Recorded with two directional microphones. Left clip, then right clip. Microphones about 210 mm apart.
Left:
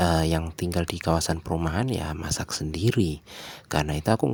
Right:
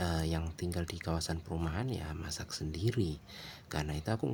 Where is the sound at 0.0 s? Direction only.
35° left (ahead or behind).